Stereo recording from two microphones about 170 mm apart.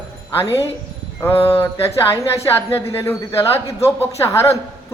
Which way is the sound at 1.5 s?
15° left (ahead or behind).